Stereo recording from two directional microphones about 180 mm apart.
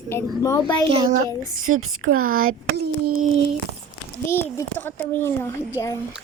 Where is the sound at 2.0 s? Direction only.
50° right (ahead or behind).